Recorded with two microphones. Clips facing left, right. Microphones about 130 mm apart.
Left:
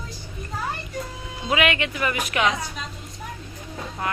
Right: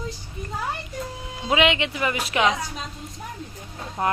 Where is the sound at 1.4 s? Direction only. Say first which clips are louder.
Right 2 dB; 25° right (ahead or behind).